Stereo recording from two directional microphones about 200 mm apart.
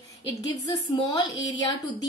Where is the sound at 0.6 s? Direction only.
20° left (ahead or behind).